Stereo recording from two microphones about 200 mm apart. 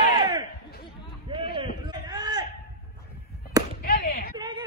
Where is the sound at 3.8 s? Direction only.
50° left (ahead or behind).